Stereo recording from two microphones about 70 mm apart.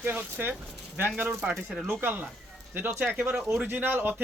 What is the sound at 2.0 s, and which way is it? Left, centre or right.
A man's voice, right.